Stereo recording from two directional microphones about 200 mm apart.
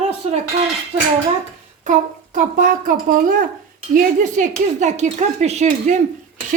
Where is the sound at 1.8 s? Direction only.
40° right (ahead or behind).